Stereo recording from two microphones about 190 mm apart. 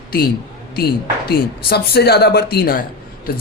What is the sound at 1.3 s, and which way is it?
Speech, 55° left (ahead or behind).